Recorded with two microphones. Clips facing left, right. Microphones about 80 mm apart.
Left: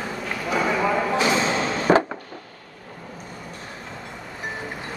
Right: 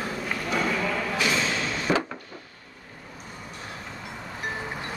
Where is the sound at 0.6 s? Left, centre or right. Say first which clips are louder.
Left 7 dB; centre.